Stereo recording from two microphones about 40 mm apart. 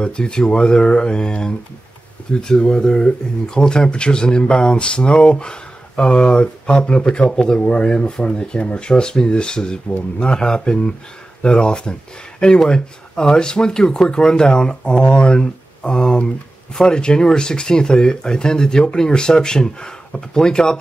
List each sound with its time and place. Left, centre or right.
0.0 s speech: left